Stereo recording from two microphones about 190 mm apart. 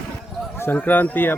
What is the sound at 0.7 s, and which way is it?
Speech, 10° left (ahead or behind).